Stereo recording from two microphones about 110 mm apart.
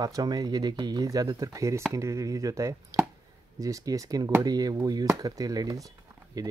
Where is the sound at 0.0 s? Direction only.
35° right (ahead or behind).